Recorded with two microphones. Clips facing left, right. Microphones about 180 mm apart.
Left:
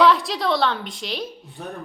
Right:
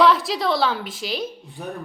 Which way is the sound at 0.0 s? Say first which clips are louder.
Even; centre (ahead or behind).